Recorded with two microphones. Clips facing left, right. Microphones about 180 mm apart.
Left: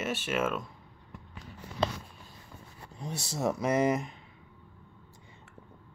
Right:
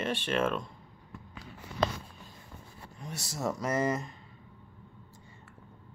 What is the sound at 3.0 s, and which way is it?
Speech, 30° left (ahead or behind).